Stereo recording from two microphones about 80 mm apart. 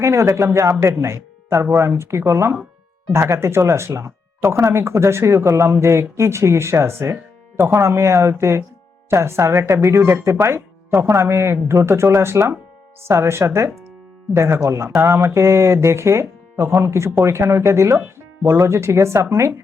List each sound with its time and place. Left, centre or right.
0.0 s speech: right